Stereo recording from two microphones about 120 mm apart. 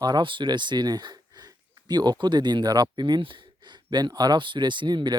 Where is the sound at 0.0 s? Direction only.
40° right (ahead or behind).